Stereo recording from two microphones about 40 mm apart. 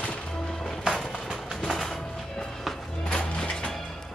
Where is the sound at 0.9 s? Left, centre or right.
Centre.